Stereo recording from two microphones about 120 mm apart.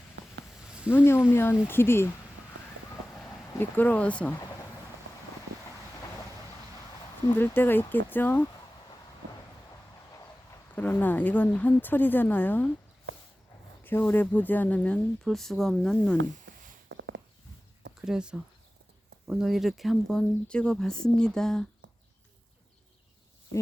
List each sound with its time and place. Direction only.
0.9 s speech: 20° left (ahead or behind)
3.6 s speech: 15° left (ahead or behind)
7.3 s speech: 15° left (ahead or behind)
10.8 s speech: 15° left (ahead or behind)
13.8 s speech: 15° left (ahead or behind)
18.0 s speech: 5° right (ahead or behind)